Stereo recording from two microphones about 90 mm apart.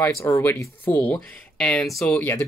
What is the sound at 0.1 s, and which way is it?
Speech, 35° left (ahead or behind).